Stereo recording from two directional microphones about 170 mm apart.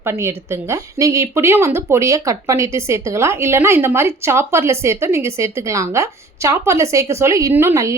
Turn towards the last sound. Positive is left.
turn(degrees=-15)  # may be behind; listen again after turning